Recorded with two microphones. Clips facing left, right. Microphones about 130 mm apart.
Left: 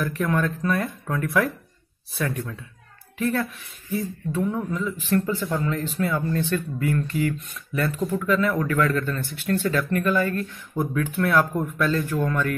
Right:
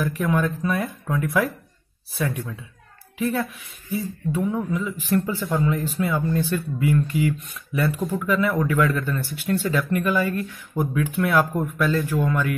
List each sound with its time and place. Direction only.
0.0 s speech: 5° right (ahead or behind)
8.0 s speech: 25° right (ahead or behind)
8.4 s speech: 10° right (ahead or behind)